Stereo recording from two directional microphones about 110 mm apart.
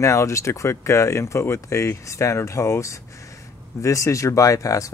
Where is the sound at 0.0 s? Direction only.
25° left (ahead or behind).